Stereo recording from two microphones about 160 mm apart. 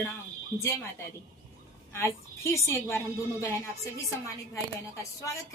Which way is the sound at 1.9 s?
15° left (ahead or behind).